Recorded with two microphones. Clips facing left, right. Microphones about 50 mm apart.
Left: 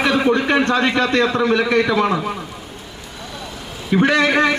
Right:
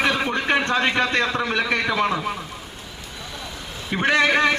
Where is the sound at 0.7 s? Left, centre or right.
Centre.